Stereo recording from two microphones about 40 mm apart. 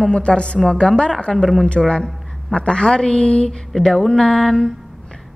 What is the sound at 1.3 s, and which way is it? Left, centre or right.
Speech, centre.